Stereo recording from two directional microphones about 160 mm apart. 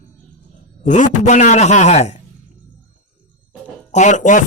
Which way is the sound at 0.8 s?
50° left (ahead or behind).